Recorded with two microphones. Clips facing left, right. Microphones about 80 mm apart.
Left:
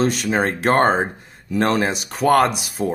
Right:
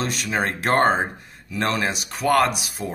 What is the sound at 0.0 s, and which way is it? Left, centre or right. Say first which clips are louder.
Speech: left 5 dB; left.